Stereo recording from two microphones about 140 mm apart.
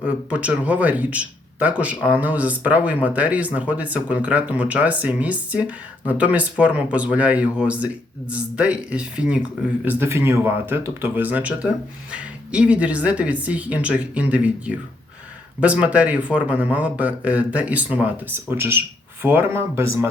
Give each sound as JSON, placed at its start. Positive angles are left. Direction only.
{"t": 0.0, "sound": "a man's voice", "side_deg": -10}